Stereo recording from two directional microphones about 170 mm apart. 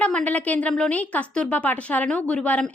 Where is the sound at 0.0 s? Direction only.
10° left (ahead or behind).